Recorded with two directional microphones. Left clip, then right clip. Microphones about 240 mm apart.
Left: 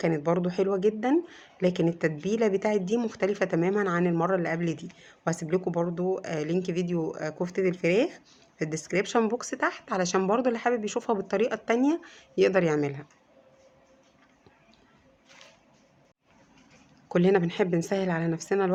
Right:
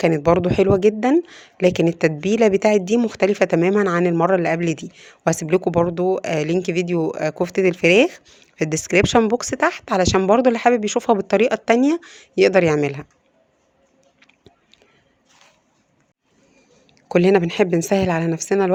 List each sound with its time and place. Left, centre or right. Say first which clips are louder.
0.0 s speech: right 10 dB; right
17.1 s speech: right 8 dB; right